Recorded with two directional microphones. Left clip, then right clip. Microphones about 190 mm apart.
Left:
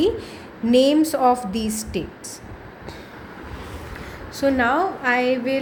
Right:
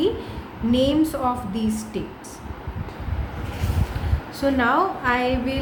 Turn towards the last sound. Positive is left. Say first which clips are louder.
# left 2 dB
turn(degrees=30)  # may be behind; listen again after turning